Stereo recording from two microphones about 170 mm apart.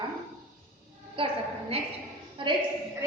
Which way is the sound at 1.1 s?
30° right (ahead or behind).